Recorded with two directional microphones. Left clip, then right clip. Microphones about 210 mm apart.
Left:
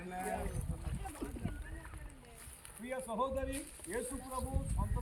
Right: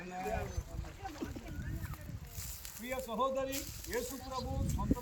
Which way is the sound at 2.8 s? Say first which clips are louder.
Right 2 dB; centre (ahead or behind).